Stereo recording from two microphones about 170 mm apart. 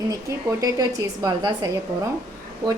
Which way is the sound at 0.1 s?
20° right (ahead or behind).